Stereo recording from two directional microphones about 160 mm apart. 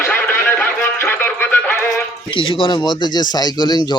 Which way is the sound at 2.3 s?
35° left (ahead or behind).